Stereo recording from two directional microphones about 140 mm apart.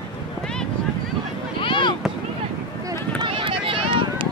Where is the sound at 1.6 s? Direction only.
35° left (ahead or behind).